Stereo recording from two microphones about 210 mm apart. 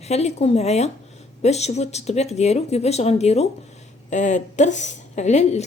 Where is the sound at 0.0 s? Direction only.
30° left (ahead or behind).